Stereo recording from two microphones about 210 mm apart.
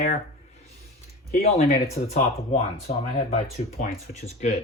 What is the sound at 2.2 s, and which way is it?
Speech, 30° left (ahead or behind).